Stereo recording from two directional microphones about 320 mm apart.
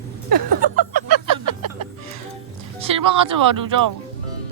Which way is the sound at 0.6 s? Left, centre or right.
Right.